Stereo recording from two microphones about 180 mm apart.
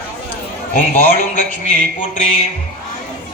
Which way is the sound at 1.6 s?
45° left (ahead or behind).